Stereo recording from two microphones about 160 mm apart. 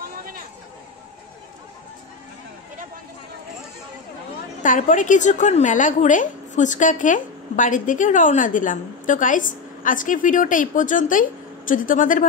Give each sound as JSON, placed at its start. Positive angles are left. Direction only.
{"t": 4.6, "sound": "a woman's voice", "side_deg": 55}